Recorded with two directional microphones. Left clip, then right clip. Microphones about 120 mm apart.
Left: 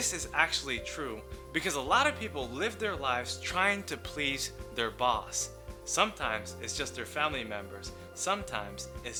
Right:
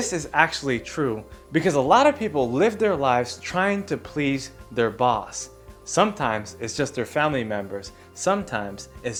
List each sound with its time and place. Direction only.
0.0 s speech: 65° right (ahead or behind); by 1.1 s 90° right
1.5 s speech: 55° right (ahead or behind); by 3.3 s 85° right
3.4 s speech: 55° right (ahead or behind)
3.8 s speech: 35° right (ahead or behind)
4.1 s speech: 50° right (ahead or behind)
5.9 s speech: 70° right (ahead or behind)
6.6 s speech: 85° right